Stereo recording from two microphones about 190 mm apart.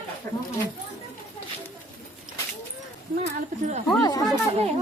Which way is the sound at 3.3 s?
35° right (ahead or behind).